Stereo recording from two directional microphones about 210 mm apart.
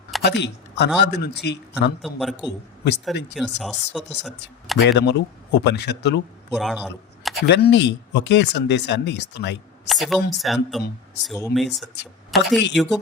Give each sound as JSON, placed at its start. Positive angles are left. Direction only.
{"t": 0.2, "sound": "speech", "side_deg": 55}
{"t": 2.0, "sound": "speech", "side_deg": 0}
{"t": 4.8, "sound": "speech", "side_deg": 55}
{"t": 6.5, "sound": "speech", "side_deg": 0}
{"t": 7.4, "sound": "speech", "side_deg": 50}
{"t": 9.8, "sound": "speech", "side_deg": 0}